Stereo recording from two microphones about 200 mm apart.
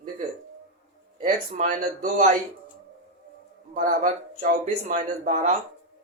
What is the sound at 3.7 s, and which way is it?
Speech, 40° right (ahead or behind).